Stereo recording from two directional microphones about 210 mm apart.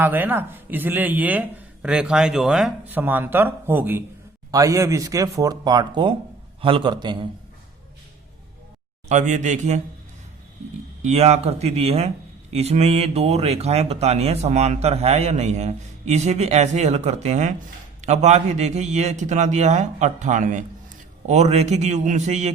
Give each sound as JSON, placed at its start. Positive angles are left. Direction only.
{"t": 0.0, "sound": "a man's voice", "side_deg": -10}
{"t": 9.0, "sound": "speech", "side_deg": -35}
{"t": 11.0, "sound": "speech", "side_deg": -30}